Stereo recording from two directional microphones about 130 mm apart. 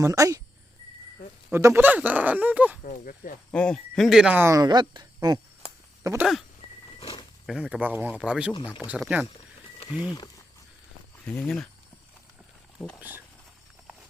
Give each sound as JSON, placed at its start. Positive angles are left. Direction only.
{"t": 0.0, "sound": "speech", "side_deg": -25}
{"t": 1.5, "sound": "speech", "side_deg": -15}
{"t": 2.8, "sound": "speech", "side_deg": 85}
{"t": 3.5, "sound": "speech", "side_deg": 10}
{"t": 4.4, "sound": "speech", "side_deg": -30}
{"t": 6.0, "sound": "speech", "side_deg": -20}
{"t": 7.0, "sound": "roaring cats", "side_deg": 45}
{"t": 7.4, "sound": "speech", "side_deg": -5}
{"t": 11.3, "sound": "speech", "side_deg": 10}
{"t": 13.0, "sound": "speech", "side_deg": -15}